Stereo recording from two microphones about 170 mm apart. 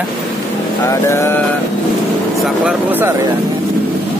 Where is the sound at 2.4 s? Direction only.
5° right (ahead or behind).